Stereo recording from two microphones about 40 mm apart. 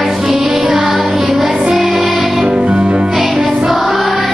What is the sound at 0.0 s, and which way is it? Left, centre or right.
Music, centre.